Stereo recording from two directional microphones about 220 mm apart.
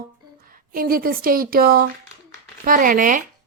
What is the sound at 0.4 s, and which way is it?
A woman's voice, 40° right (ahead or behind).